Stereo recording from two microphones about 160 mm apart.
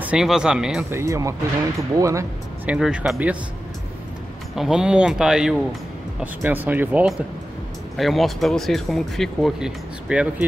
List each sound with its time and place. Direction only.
0.0 s speech: 5° right (ahead or behind)
0.8 s speech: 15° right (ahead or behind)
2.7 s speech: 5° right (ahead or behind)
4.6 s speech: 5° right (ahead or behind)